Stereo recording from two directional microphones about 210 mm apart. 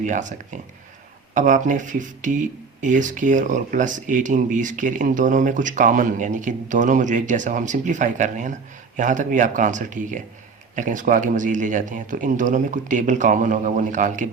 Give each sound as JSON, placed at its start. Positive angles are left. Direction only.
{"t": 0.0, "sound": "speech", "side_deg": -35}